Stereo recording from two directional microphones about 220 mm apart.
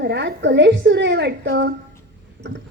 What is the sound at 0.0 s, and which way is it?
A woman's voice, 50° right (ahead or behind).